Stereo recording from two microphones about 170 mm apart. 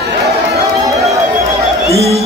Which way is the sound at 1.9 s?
35° right (ahead or behind).